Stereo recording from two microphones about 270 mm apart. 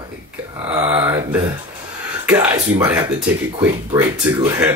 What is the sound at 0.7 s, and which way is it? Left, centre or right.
Speech, centre.